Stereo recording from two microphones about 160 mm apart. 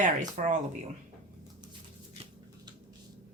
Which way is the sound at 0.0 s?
55° right (ahead or behind).